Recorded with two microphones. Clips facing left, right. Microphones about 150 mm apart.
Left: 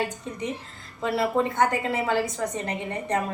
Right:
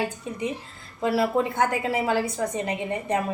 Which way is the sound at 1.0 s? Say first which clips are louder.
Right 1 dB; 10° right (ahead or behind).